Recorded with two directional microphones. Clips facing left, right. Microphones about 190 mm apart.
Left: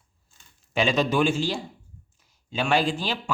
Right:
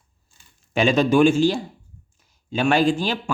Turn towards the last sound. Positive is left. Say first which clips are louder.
# right 7 dB
turn(degrees=-45)  # may be behind; listen again after turning